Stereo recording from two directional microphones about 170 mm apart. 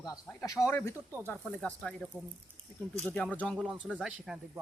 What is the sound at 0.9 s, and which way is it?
Speech, 10° right (ahead or behind).